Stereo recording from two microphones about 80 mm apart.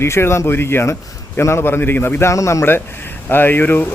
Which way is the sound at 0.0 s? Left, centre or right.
Left.